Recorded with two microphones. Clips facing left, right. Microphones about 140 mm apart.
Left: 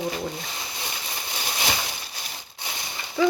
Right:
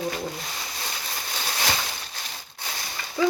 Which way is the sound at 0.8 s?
20° left (ahead or behind).